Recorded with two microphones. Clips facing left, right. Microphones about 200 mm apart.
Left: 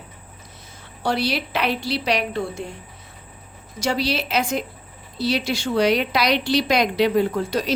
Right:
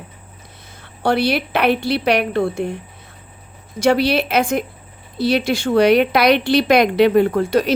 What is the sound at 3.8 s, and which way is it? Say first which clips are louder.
A woman's voice: right 8 dB; 60° right (ahead or behind).